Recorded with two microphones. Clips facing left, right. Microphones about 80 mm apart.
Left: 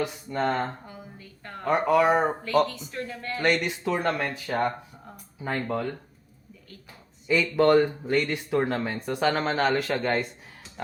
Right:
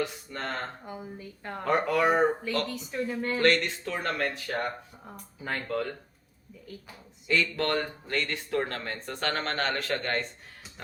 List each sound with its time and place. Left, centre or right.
0.0 s speech: centre
0.9 s a woman's voice: centre
1.6 s speech: centre
2.6 s speech: centre
3.4 s speech: centre
7.3 s speech: centre